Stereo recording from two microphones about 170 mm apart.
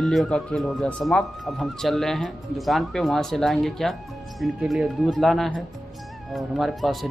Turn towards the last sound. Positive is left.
turn(degrees=0)  # may be behind; listen again after turning